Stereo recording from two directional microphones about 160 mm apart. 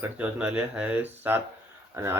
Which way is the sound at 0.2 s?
10° right (ahead or behind).